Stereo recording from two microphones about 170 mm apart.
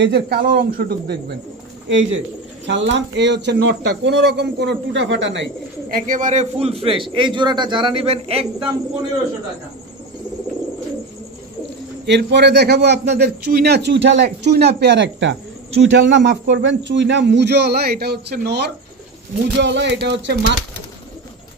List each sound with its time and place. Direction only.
0.0 s speech: 70° right (ahead or behind)
1.9 s speech: 90° right; by 8.6 s 35° right (ahead or behind)
12.1 s a man's voice: 90° right
14.4 s a man's voice: 75° right (ahead or behind)
19.5 s a man's voice: 90° right